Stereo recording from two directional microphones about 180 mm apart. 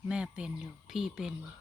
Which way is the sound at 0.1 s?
5° right (ahead or behind).